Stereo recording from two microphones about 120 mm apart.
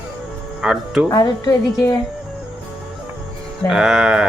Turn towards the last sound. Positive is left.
turn(degrees=-5)  # may be behind; listen again after turning